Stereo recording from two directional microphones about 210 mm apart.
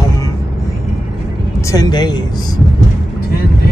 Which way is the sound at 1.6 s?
15° left (ahead or behind).